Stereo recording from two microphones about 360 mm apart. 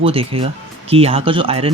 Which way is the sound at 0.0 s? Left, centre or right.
Centre.